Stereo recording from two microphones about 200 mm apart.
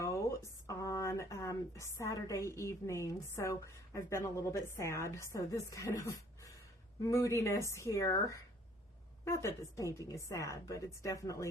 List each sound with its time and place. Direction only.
0.0 s a woman's voice: 15° left (ahead or behind)